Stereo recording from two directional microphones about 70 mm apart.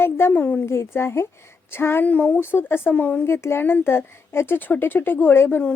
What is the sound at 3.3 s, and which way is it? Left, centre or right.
A woman's voice, left.